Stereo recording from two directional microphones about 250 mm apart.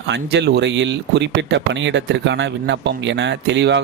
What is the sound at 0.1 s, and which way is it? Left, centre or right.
Speech, right.